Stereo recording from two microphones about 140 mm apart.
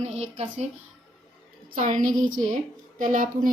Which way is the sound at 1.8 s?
65° right (ahead or behind).